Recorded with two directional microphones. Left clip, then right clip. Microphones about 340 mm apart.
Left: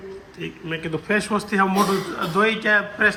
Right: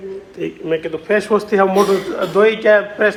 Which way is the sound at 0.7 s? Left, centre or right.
Centre.